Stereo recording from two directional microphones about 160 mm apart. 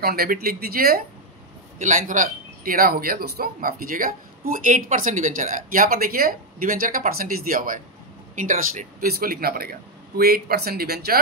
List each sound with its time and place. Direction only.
0.0 s a man's voice: 70° right (ahead or behind)
1.8 s a man's voice: 50° right (ahead or behind); by 11.1 s 75° right (ahead or behind)